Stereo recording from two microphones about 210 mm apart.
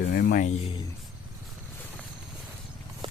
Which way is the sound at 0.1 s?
45° left (ahead or behind).